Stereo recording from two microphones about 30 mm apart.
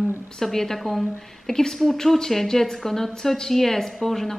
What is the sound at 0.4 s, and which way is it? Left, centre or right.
A woman's voice, centre.